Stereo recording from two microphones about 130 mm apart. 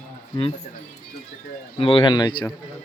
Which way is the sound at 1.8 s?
40° left (ahead or behind).